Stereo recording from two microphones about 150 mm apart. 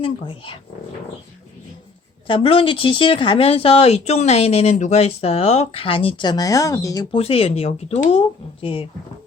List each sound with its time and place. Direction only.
0.0 s speech: 35° left (ahead or behind)
2.2 s speech: 35° left (ahead or behind)
7.1 s speech: 40° left (ahead or behind)